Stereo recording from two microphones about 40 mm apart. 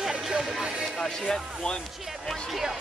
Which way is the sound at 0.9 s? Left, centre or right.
Centre.